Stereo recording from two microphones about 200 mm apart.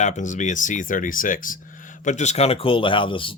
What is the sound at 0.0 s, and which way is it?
Speech, 35° left (ahead or behind).